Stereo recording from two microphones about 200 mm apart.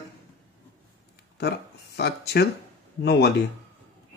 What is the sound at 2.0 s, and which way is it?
Speech, 55° left (ahead or behind).